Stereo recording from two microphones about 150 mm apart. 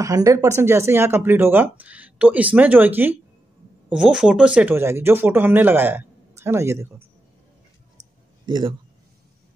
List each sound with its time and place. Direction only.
0.0 s speech: 20° right (ahead or behind)
8.5 s a man's voice: 30° right (ahead or behind)